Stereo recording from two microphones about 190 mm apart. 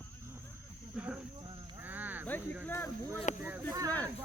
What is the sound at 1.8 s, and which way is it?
Frog, 10° right (ahead or behind).